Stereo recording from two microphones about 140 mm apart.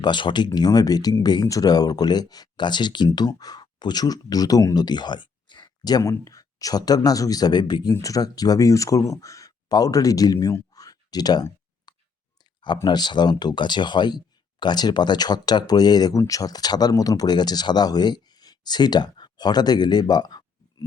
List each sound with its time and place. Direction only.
0.0 s speech: 35° left (ahead or behind)
11.9 s clicking: 30° left (ahead or behind)
12.6 s speech: 30° left (ahead or behind)